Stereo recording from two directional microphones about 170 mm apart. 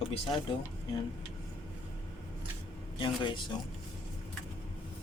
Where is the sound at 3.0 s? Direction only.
30° left (ahead or behind).